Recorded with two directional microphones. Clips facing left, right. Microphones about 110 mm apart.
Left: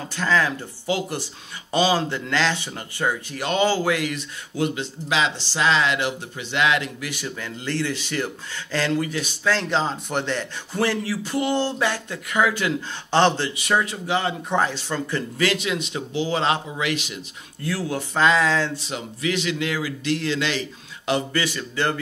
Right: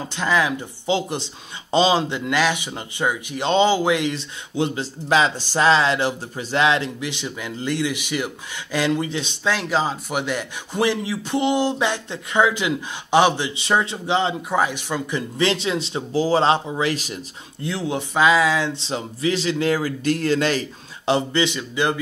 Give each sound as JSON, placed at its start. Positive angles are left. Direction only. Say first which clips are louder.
{"t": 0.1, "sound": "speech", "louder": "right 1 dB", "side_deg": -15}
{"t": 5.1, "sound": "speech", "louder": "right 5 dB", "side_deg": -45}
{"t": 9.6, "sound": "speech", "louder": "right 1 dB", "side_deg": -5}
{"t": 13.6, "sound": "speech", "louder": "right 2 dB", "side_deg": -25}
{"t": 14.5, "sound": "speech", "louder": "right 1 dB", "side_deg": -10}
{"t": 17.6, "sound": "speech", "louder": "right 1 dB", "side_deg": -20}
{"t": 18.1, "sound": "speech", "louder": "right 2 dB", "side_deg": -5}
{"t": 18.8, "sound": "speech", "louder": "right 4 dB", "side_deg": -30}
{"t": 21.0, "sound": "speech", "louder": "right 4 dB", "side_deg": -25}